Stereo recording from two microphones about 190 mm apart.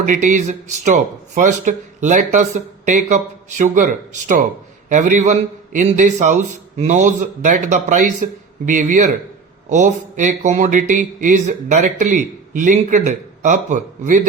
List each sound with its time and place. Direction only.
0.0 s speech: 40° right (ahead or behind)
4.9 s speech: 40° right (ahead or behind)